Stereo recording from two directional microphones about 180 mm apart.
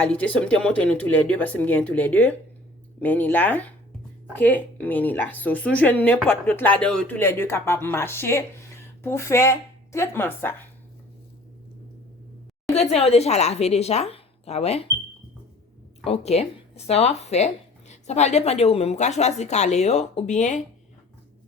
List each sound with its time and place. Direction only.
0.0 s speech: 5° left (ahead or behind)
12.9 s speech: 35° left (ahead or behind)
16.0 s speech: 35° left (ahead or behind)